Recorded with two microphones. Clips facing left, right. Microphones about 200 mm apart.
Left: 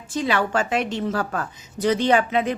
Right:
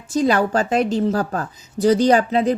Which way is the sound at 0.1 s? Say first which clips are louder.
Right 5 dB; 40° right (ahead or behind).